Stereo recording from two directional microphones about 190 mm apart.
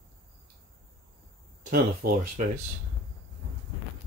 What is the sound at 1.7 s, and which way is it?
Speech, 45° right (ahead or behind).